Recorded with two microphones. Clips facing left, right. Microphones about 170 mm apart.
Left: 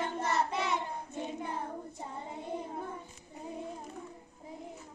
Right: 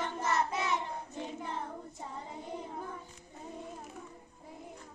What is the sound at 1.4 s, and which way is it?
Child singing, 5° left (ahead or behind).